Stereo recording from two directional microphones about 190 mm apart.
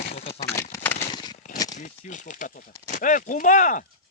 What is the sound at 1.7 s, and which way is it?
Speech, 40° left (ahead or behind).